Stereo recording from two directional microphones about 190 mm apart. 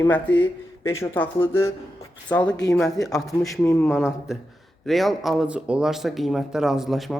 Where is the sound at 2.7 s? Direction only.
5° left (ahead or behind).